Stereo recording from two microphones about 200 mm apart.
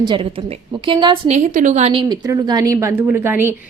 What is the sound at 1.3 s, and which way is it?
A woman's voice, 40° right (ahead or behind).